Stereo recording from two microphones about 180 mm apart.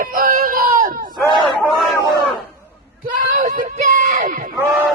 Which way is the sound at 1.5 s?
5° left (ahead or behind).